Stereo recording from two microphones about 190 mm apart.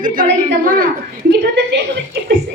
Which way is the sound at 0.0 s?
45° right (ahead or behind).